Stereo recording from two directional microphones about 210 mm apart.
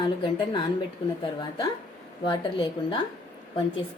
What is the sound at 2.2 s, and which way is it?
Speech, 20° left (ahead or behind).